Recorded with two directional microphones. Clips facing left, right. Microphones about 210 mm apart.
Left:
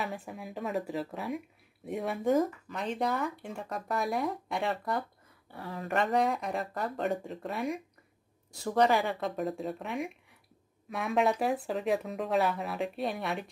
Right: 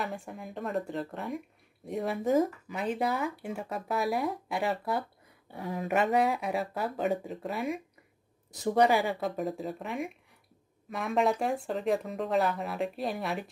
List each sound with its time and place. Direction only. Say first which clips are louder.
0.0 s speech: right 1 dB; centre (ahead or behind)
5.5 s speech: right 4 dB; 15° right (ahead or behind)
5.9 s speech: right 1 dB; 5° right (ahead or behind)
8.6 s speech: right 2 dB; 10° right (ahead or behind)